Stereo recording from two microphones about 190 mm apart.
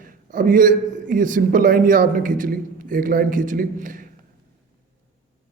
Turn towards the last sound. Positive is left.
turn(degrees=-45)  # may be behind; listen again after turning